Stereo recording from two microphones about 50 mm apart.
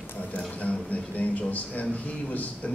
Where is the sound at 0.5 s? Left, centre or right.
Left.